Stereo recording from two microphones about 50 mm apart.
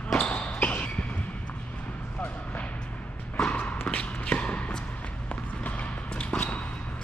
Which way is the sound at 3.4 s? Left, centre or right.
Left.